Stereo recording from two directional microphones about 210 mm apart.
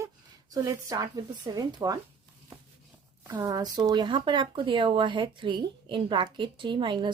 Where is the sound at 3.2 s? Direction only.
20° right (ahead or behind).